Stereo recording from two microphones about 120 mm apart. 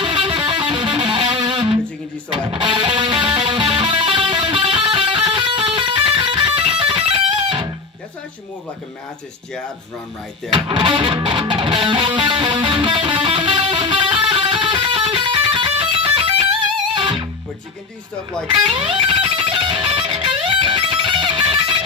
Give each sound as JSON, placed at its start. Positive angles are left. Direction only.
{"t": 0.0, "sound": "music", "side_deg": -45}
{"t": 10.5, "sound": "music", "side_deg": -45}
{"t": 18.7, "sound": "music", "side_deg": -45}